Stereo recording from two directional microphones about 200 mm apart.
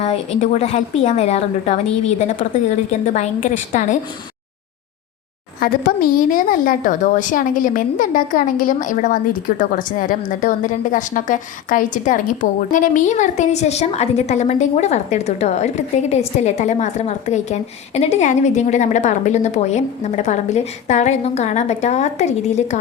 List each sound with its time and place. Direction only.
0.0 s speech: 35° left (ahead or behind)
5.5 s speech: 45° left (ahead or behind)